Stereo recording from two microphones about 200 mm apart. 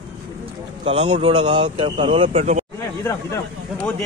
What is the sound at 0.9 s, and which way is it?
Speech, 30° right (ahead or behind).